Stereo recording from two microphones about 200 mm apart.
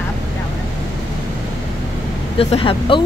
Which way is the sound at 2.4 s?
30° left (ahead or behind).